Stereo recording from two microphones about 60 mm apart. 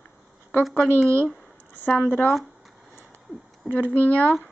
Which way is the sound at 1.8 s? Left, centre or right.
Left.